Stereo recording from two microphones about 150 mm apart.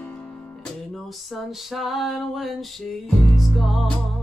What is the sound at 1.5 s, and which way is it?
Music, centre (ahead or behind).